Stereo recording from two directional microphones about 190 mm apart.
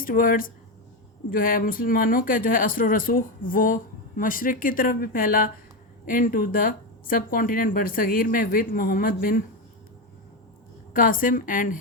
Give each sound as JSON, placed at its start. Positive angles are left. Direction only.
{"t": 0.0, "sound": "speech", "side_deg": 45}
{"t": 10.9, "sound": "speech", "side_deg": 50}